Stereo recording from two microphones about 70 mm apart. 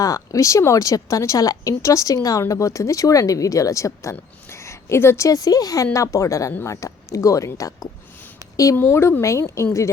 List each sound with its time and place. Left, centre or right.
0.0 s speech: left
5.4 s speech: left
8.4 s a sound: left
8.7 s speech: left